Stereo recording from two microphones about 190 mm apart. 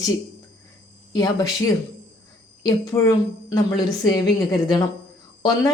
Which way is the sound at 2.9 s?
15° left (ahead or behind).